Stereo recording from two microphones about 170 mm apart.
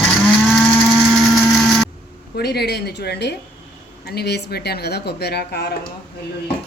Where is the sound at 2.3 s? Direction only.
70° left (ahead or behind).